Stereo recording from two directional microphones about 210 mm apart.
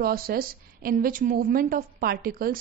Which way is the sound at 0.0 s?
45° right (ahead or behind).